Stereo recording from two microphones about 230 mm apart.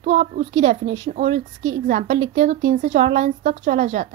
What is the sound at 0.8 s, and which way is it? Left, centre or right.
Speech, right.